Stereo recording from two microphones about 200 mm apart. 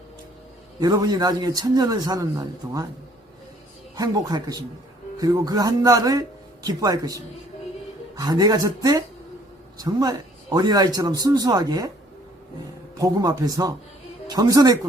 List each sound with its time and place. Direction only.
0.8 s a man's voice: 20° right (ahead or behind)
3.9 s a man's voice: 20° right (ahead or behind)
13.0 s speech: 20° right (ahead or behind)